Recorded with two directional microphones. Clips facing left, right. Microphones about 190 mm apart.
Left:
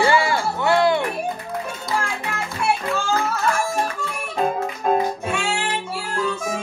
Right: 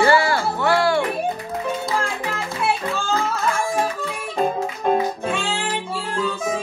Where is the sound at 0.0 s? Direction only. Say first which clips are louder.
Right 2 dB; 20° left (ahead or behind).